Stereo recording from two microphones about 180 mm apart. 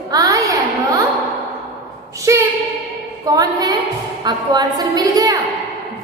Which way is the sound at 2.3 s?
15° right (ahead or behind).